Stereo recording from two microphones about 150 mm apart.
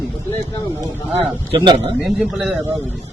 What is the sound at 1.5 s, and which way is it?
Speech, 30° right (ahead or behind).